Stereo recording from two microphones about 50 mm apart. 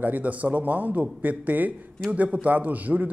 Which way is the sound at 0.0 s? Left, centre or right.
Right.